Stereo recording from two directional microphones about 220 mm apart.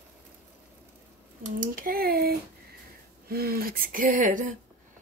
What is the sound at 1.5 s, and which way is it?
Speech, 40° right (ahead or behind).